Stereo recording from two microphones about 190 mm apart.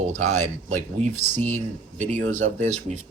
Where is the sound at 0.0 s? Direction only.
40° right (ahead or behind).